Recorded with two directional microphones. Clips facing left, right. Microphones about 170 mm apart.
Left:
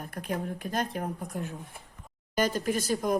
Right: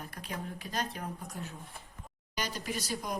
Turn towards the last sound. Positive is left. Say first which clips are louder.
# left 9 dB
turn(degrees=50)  # may be behind; listen again after turning